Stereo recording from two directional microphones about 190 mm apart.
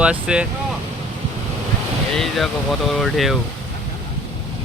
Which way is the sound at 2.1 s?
Centre (ahead or behind).